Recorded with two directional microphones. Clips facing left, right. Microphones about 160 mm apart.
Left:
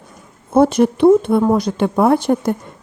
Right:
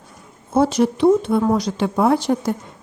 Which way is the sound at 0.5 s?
55° left (ahead or behind).